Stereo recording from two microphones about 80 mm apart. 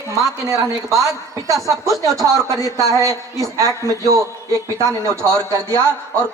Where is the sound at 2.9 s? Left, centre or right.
Right.